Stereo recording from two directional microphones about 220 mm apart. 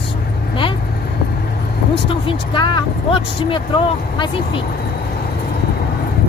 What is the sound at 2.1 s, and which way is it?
Speech, 20° left (ahead or behind).